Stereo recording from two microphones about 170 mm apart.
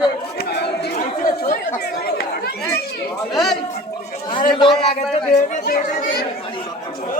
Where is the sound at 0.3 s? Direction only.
75° left (ahead or behind).